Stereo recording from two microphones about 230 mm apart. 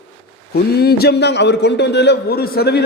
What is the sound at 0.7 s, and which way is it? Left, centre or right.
A man's voice, left.